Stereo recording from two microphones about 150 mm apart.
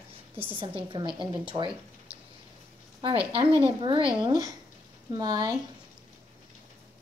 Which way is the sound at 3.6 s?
35° right (ahead or behind).